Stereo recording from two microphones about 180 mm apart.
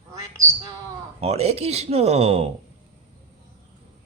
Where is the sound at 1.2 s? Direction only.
35° right (ahead or behind).